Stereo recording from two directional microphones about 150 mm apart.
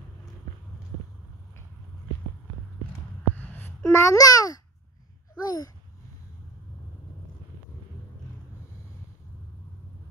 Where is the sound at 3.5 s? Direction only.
15° left (ahead or behind).